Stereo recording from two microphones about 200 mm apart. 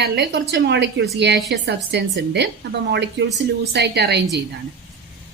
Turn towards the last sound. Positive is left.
turn(degrees=-55)  # may be behind; listen again after turning